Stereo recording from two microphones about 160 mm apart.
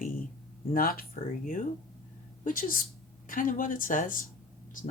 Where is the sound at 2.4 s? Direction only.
60° left (ahead or behind).